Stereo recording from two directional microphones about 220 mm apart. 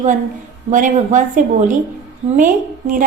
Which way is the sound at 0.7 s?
35° right (ahead or behind).